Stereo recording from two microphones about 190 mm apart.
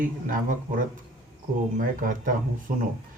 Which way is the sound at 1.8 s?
45° right (ahead or behind).